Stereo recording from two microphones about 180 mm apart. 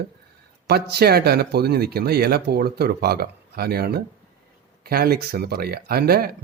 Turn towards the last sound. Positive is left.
turn(degrees=-60)  # may be behind; listen again after turning